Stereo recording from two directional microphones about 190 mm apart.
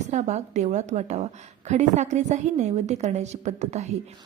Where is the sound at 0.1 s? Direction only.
35° right (ahead or behind).